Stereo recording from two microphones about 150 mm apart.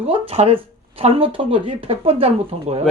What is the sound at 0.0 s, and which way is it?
Speech, 40° right (ahead or behind).